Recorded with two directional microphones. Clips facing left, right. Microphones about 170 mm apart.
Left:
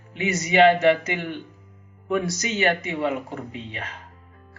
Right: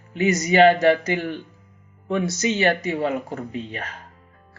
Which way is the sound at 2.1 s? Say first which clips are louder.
Right 2 dB; 25° right (ahead or behind).